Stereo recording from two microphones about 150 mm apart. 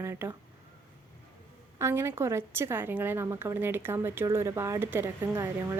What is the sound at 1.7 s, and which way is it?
A woman's voice, 15° right (ahead or behind).